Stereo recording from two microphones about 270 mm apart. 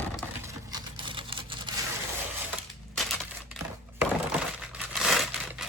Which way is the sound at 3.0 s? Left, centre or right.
Centre.